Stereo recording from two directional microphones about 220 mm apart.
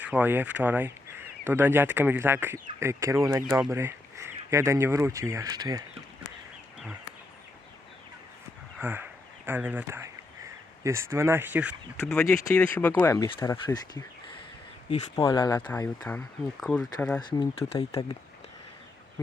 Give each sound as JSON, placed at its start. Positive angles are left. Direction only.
{"t": 0.0, "sound": "speech", "side_deg": -5}
{"t": 8.8, "sound": "speech", "side_deg": -10}
{"t": 12.1, "sound": "speech", "side_deg": 10}
{"t": 14.8, "sound": "speech", "side_deg": 25}
{"t": 17.2, "sound": "speech", "side_deg": 20}